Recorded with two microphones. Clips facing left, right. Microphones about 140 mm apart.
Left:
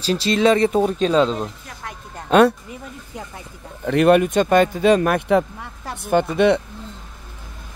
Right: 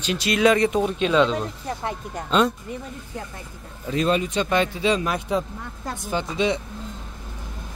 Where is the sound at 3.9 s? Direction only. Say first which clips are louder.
Left 8 dB; 65° left (ahead or behind).